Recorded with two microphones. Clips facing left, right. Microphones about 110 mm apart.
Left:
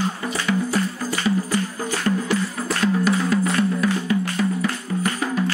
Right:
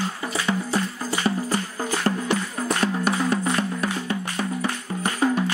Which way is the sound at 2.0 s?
25° right (ahead or behind).